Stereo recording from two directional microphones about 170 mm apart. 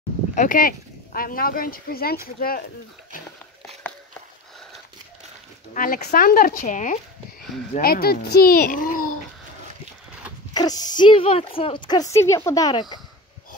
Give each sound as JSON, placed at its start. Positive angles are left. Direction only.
{"t": 0.4, "sound": "speech", "side_deg": 55}
{"t": 5.7, "sound": "speech", "side_deg": 50}
{"t": 7.8, "sound": "speech", "side_deg": 65}
{"t": 10.5, "sound": "a woman's voice", "side_deg": 25}